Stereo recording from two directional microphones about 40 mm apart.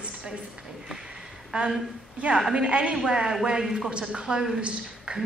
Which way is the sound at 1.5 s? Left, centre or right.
Right.